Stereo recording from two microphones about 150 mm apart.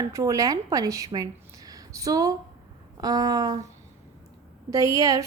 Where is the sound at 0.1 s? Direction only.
20° right (ahead or behind).